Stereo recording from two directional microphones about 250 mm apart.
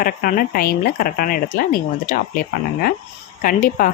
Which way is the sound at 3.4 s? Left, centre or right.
Left.